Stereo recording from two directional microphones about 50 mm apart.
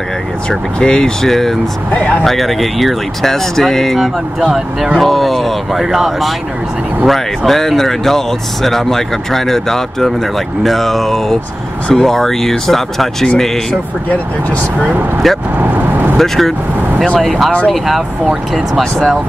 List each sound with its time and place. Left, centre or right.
0.5 s speech: centre
2.0 s speech: left
2.2 s speech: centre
15.2 s speech: centre
15.6 s vehicle: right
16.2 s speech: centre